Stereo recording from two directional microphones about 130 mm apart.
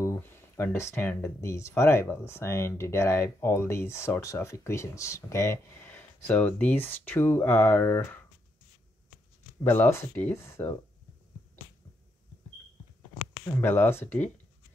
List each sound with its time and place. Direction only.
0.0 s speech: 20° left (ahead or behind)
9.6 s speech: 15° left (ahead or behind)
13.6 s speech: 15° left (ahead or behind)